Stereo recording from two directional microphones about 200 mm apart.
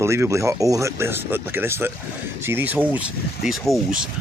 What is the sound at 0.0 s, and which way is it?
Speech, 15° right (ahead or behind).